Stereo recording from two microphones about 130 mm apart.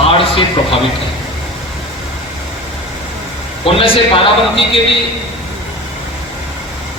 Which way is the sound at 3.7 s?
45° left (ahead or behind).